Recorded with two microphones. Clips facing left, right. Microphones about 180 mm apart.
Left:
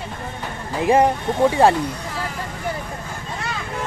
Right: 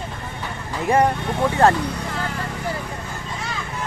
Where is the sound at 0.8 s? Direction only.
20° left (ahead or behind).